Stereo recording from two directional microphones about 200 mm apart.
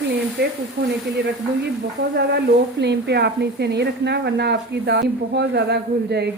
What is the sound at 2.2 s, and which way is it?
Speech, 55° right (ahead or behind).